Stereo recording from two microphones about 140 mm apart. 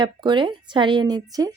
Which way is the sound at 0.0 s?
35° right (ahead or behind).